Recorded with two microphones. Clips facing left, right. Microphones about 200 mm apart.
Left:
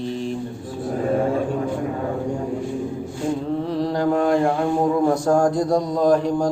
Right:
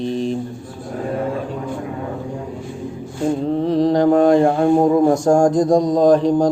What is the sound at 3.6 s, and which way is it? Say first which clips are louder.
Mantra: right 9 dB; 20° right (ahead or behind).